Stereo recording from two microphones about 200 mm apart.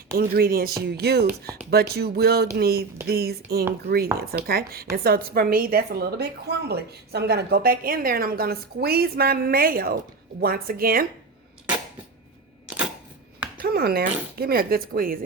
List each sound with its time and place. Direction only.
0.2 s a woman's voice: 45° right (ahead or behind)
13.6 s a woman's voice: 50° right (ahead or behind)